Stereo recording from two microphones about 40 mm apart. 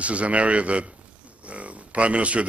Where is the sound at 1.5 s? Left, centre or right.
Right.